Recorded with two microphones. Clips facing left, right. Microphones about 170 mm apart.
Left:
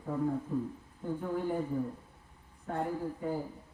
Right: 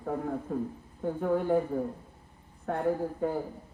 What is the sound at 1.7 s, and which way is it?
Speech, 60° right (ahead or behind).